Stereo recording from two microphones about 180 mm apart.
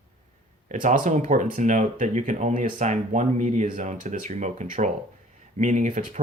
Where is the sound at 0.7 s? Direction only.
45° right (ahead or behind).